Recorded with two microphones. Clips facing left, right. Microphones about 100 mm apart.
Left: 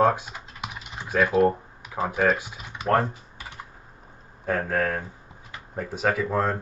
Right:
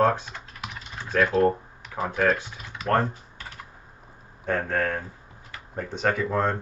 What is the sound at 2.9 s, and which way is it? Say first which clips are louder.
Typing: left 1 dB; 5° left (ahead or behind).